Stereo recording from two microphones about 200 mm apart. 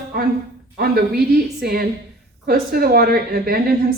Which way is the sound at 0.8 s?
50° right (ahead or behind).